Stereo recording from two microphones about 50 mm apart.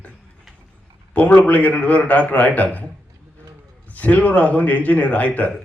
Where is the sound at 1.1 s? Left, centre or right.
Left.